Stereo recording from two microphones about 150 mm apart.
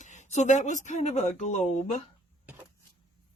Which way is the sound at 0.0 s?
50° left (ahead or behind).